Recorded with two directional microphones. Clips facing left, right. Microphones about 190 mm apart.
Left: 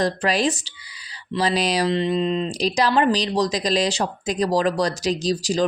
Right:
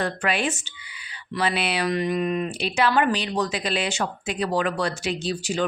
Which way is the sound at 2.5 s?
35° left (ahead or behind).